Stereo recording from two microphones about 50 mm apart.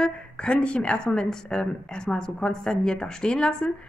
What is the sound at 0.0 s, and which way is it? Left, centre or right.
A woman's voice, left.